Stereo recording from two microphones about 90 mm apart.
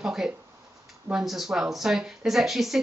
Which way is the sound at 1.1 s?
Centre (ahead or behind).